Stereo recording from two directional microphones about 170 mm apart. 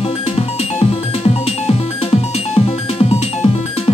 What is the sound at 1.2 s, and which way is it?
Music, 35° left (ahead or behind).